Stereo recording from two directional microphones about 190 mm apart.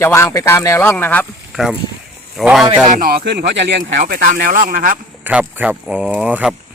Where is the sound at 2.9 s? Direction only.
50° right (ahead or behind).